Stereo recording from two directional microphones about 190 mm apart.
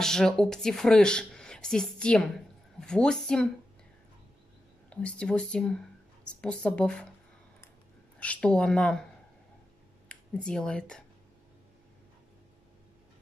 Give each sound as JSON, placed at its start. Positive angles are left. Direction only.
{"t": 0.0, "sound": "speech", "side_deg": 5}
{"t": 4.8, "sound": "speech", "side_deg": 5}
{"t": 8.2, "sound": "speech", "side_deg": 5}
{"t": 10.0, "sound": "speech", "side_deg": 5}